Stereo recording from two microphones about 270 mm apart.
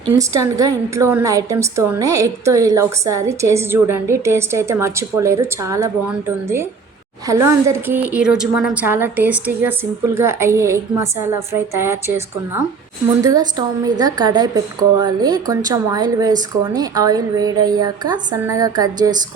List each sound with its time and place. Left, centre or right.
0.1 s a woman's voice: centre